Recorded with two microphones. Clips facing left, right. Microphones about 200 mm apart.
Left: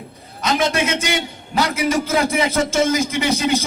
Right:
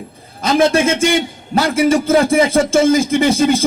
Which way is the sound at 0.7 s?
50° right (ahead or behind).